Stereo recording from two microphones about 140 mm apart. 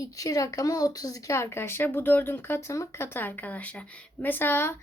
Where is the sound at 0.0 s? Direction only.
25° left (ahead or behind).